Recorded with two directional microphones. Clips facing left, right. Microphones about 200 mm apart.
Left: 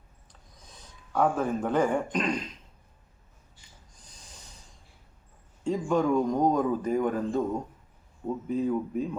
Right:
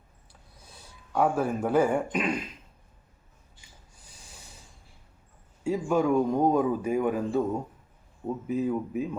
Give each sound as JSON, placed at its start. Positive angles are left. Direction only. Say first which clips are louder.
{"t": 0.5, "sound": "a man's voice", "louder": "right 1 dB", "side_deg": -10}
{"t": 3.9, "sound": "rub", "louder": "right 1 dB", "side_deg": -10}
{"t": 5.6, "sound": "speech", "louder": "right 1 dB", "side_deg": -10}
{"t": 8.4, "sound": "speech", "louder": "even", "side_deg": -5}